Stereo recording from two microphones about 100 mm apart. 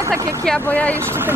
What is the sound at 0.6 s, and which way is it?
Speech, 15° left (ahead or behind).